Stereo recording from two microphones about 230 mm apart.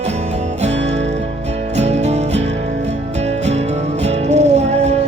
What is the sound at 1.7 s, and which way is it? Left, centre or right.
Music, right.